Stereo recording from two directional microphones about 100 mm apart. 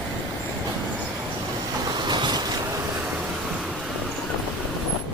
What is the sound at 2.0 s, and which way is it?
Boat, 50° right (ahead or behind).